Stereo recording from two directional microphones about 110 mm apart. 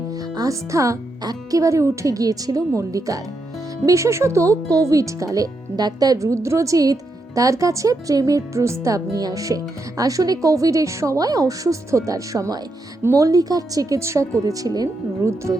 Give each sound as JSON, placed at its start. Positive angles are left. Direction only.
{"t": 0.1, "sound": "speech", "side_deg": -30}